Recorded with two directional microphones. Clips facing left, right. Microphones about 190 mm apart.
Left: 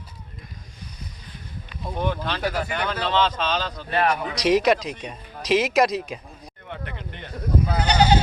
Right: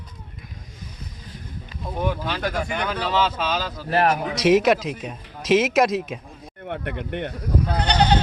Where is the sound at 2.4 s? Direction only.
5° left (ahead or behind).